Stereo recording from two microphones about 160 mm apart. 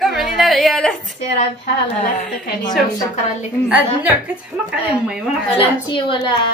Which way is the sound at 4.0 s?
10° right (ahead or behind).